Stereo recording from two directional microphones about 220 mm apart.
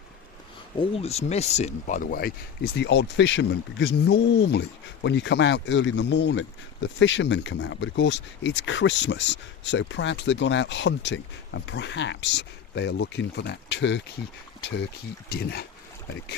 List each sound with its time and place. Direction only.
0.8 s speech: 25° left (ahead or behind); by 14.0 s 55° left (ahead or behind)
15.3 s speech: 45° left (ahead or behind)